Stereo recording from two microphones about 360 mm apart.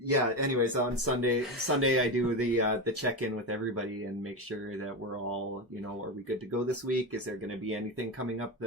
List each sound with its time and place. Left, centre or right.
0.1 s speech: right
6.7 s speech: right